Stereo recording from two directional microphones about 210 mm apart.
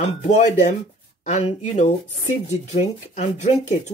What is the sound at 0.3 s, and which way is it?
Speech, 35° left (ahead or behind).